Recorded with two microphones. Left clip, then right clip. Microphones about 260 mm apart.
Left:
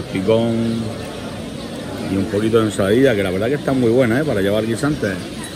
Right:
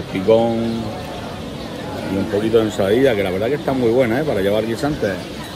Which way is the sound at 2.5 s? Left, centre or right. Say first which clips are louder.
Even; centre.